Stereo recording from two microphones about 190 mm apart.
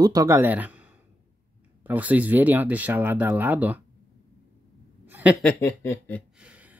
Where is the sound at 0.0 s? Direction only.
20° right (ahead or behind).